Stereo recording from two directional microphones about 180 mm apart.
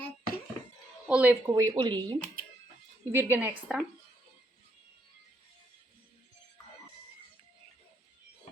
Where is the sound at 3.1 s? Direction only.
15° right (ahead or behind).